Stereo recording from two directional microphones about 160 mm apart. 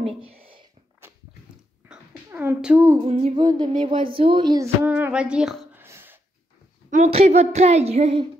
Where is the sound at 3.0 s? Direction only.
40° right (ahead or behind).